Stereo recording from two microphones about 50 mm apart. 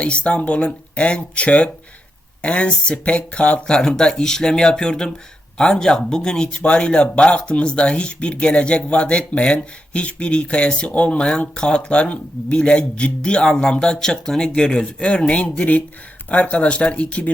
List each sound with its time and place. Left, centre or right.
0.0 s speech: left